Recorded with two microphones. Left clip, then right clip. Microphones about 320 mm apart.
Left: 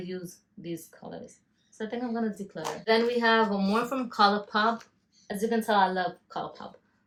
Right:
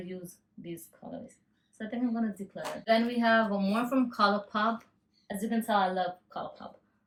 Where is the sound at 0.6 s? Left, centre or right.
Left.